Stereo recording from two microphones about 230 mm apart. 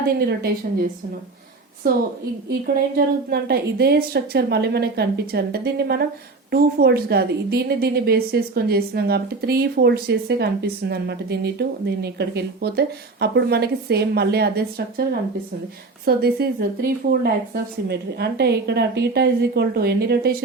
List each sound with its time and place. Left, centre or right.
0.2 s a woman's voice: right
2.5 s a woman's voice: right